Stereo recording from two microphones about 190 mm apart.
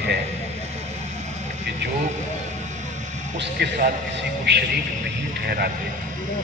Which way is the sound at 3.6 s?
65° right (ahead or behind).